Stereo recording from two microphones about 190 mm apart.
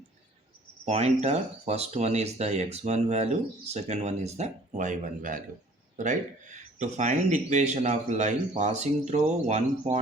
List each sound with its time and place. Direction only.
0.9 s speech: 35° right (ahead or behind)